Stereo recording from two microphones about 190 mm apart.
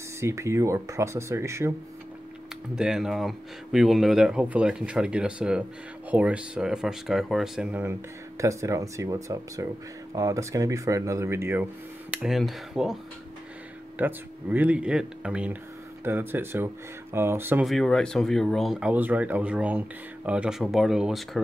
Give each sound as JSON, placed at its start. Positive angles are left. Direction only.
{"t": 0.2, "sound": "speech", "side_deg": -15}
{"t": 2.7, "sound": "speech", "side_deg": -5}
{"t": 13.9, "sound": "speech", "side_deg": -10}
{"t": 17.6, "sound": "speech", "side_deg": 0}